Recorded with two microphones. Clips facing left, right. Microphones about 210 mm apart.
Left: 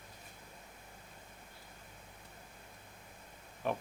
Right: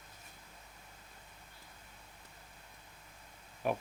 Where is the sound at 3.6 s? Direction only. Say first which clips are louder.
Right 2 dB; 10° right (ahead or behind).